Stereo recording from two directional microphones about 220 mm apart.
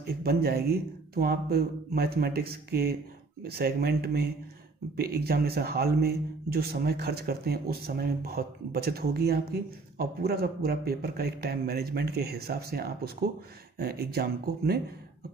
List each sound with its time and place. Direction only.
0.1 s a man's voice: 45° right (ahead or behind)